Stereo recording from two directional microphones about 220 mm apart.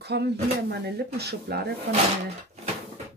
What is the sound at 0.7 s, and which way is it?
Speech, 45° right (ahead or behind).